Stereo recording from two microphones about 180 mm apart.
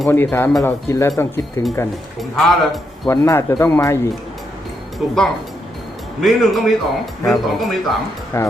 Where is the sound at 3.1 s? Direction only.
15° left (ahead or behind).